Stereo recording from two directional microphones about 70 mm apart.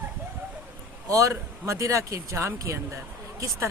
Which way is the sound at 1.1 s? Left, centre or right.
Right.